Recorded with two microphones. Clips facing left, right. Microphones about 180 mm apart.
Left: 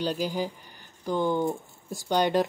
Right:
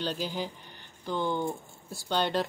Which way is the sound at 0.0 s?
10° left (ahead or behind).